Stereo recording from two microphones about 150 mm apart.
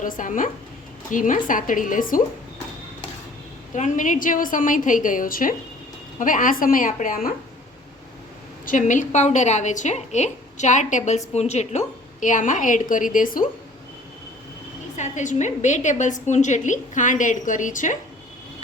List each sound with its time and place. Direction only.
0.0 s a woman's voice: 60° left (ahead or behind)
3.8 s a woman's voice: 55° left (ahead or behind)
8.6 s a woman's voice: 55° left (ahead or behind)
14.9 s a woman's voice: 55° left (ahead or behind)